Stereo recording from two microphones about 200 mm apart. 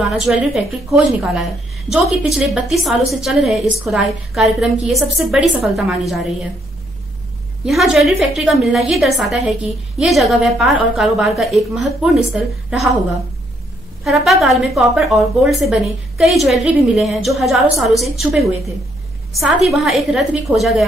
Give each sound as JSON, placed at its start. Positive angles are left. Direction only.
{"t": 0.1, "sound": "a woman's voice", "side_deg": 0}
{"t": 7.6, "sound": "a woman's voice", "side_deg": 0}
{"t": 14.0, "sound": "a woman's voice", "side_deg": 0}